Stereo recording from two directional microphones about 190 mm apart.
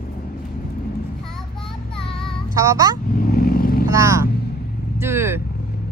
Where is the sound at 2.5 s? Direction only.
20° right (ahead or behind).